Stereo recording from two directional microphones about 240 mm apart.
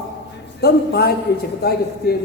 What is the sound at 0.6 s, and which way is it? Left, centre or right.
A man's voice, left.